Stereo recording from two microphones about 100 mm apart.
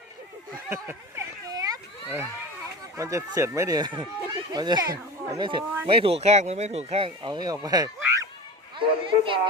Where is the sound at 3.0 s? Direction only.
35° right (ahead or behind); by 5.6 s 50° right (ahead or behind).